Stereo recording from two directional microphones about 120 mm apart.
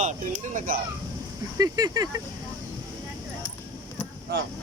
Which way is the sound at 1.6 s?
30° right (ahead or behind).